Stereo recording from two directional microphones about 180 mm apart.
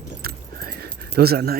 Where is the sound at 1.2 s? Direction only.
60° right (ahead or behind).